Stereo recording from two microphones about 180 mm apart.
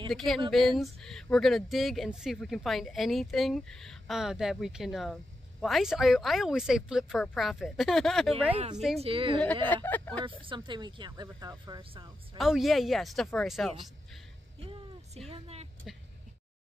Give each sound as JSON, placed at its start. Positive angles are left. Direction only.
{"t": 0.1, "sound": "speech", "side_deg": 0}
{"t": 8.5, "sound": "speech", "side_deg": -30}
{"t": 9.8, "sound": "speech", "side_deg": 10}
{"t": 10.4, "sound": "speech", "side_deg": -25}
{"t": 12.4, "sound": "speech", "side_deg": 0}
{"t": 15.2, "sound": "vehicle", "side_deg": -35}